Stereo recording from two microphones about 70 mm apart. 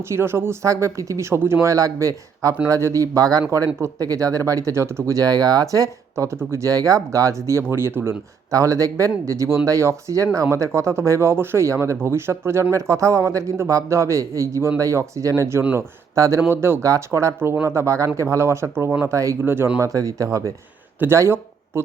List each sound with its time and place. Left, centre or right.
0.1 s speech: right
1.6 s speech: right
5.2 s speech: right
6.2 s speech: right
8.5 s speech: right
16.5 s speech: right
16.8 s speech: right
19.4 s speech: right
19.8 s speech: right
21.0 s speech: right